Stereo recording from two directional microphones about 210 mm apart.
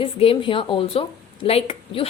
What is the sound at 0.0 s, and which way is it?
A woman's voice, 25° left (ahead or behind).